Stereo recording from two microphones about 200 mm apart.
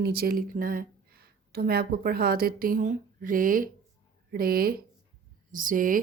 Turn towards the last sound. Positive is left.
turn(degrees=-45)  # may be behind; listen again after turning